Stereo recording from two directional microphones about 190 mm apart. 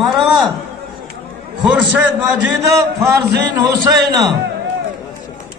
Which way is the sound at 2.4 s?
15° right (ahead or behind).